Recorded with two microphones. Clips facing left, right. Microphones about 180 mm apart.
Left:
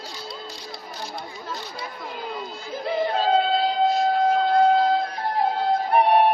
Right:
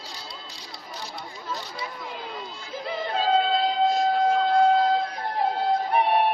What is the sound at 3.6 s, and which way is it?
Siren, 5° left (ahead or behind).